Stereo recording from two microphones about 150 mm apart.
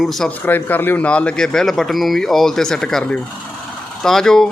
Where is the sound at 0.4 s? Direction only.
15° left (ahead or behind).